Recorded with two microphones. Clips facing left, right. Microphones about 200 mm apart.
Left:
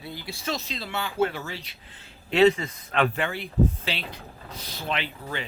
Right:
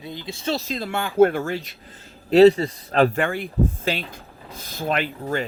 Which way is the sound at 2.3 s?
35° right (ahead or behind).